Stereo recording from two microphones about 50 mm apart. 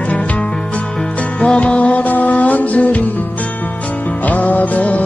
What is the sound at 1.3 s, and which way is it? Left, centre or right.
Music, left.